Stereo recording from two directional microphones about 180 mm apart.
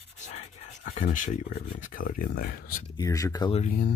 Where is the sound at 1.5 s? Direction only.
45° left (ahead or behind).